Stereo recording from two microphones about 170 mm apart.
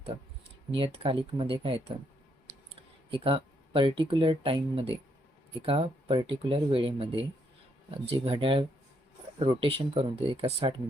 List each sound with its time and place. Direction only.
0.7 s speech: 30° right (ahead or behind)
3.1 s speech: 30° right (ahead or behind)